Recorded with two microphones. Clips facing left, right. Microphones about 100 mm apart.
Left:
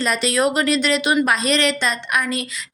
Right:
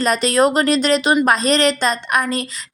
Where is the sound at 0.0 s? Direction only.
40° right (ahead or behind).